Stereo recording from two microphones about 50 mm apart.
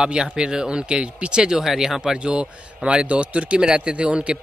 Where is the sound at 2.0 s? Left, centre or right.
Centre.